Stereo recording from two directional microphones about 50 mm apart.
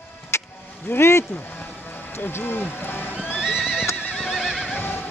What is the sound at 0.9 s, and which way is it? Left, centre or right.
Speech, left.